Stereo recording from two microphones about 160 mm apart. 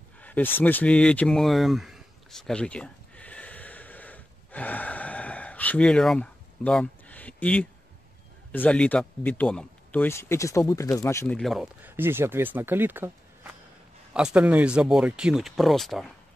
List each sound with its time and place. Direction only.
0.2 s a sound: 10° left (ahead or behind)
8.5 s speech: 10° left (ahead or behind)
11.2 s speech: 5° left (ahead or behind)